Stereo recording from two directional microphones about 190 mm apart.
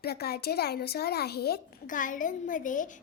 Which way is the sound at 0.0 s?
55° left (ahead or behind).